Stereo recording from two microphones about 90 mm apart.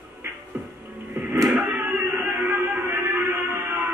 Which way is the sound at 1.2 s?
25° right (ahead or behind).